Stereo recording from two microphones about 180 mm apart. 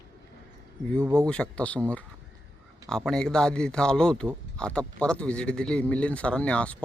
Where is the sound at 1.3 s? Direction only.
5° left (ahead or behind).